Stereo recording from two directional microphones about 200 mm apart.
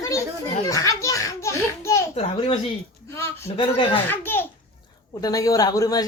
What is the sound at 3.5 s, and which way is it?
Speech, 25° left (ahead or behind).